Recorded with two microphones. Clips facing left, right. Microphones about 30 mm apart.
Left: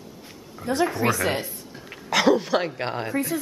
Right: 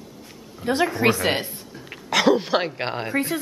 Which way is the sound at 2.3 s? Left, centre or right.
Right.